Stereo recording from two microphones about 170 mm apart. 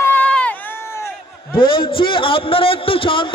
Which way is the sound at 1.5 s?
30° left (ahead or behind).